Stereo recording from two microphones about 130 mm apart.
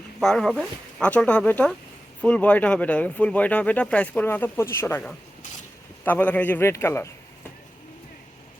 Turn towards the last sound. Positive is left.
turn(degrees=20)  # may be behind; listen again after turning